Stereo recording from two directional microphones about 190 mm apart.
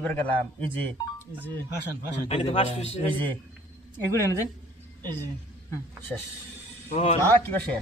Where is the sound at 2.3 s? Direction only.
30° left (ahead or behind).